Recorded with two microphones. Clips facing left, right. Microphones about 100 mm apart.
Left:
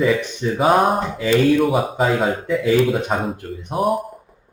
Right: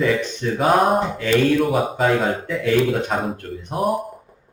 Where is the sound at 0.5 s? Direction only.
Centre (ahead or behind).